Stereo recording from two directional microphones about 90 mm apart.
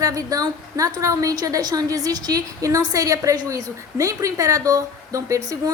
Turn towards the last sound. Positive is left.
turn(degrees=-35)  # may be behind; listen again after turning